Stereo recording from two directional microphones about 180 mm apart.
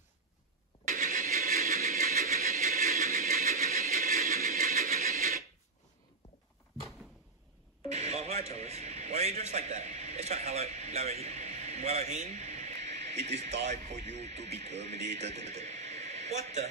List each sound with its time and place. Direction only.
0.8 s vehicle: 45° right (ahead or behind)
2.7 s music: 55° right (ahead or behind)
3.3 s vehicle: 55° right (ahead or behind)
4.6 s a sound: 55° right (ahead or behind)
7.9 s radio: 35° right (ahead or behind)
8.5 s a man's voice: 35° right (ahead or behind)